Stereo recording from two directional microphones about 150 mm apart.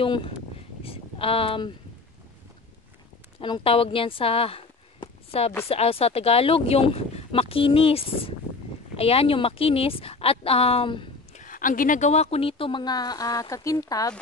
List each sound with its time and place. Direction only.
0.0 s speech: 35° left (ahead or behind)
3.3 s speech: 35° left (ahead or behind)
11.3 s speech: 60° left (ahead or behind); by 14.1 s 25° left (ahead or behind)